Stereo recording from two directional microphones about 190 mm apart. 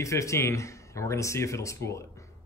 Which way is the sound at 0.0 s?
15° left (ahead or behind).